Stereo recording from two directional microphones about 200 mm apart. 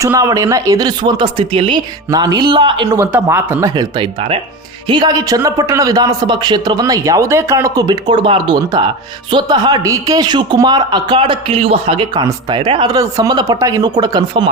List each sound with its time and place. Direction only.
0.0 s speech: 15° right (ahead or behind)
2.9 s speech: 15° right (ahead or behind)